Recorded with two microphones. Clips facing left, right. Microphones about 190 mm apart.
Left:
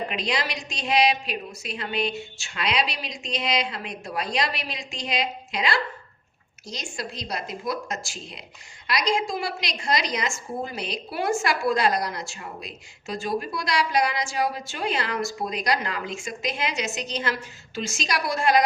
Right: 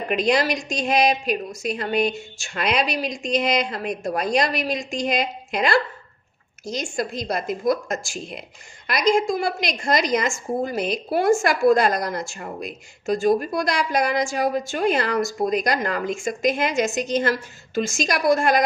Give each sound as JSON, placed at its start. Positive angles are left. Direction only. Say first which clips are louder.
{"t": 0.1, "sound": "a woman's voice", "louder": "right 8 dB", "side_deg": -50}